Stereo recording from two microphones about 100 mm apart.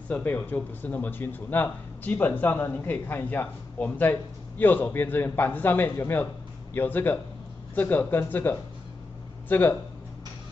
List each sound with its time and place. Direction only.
0.1 s speech: 15° left (ahead or behind)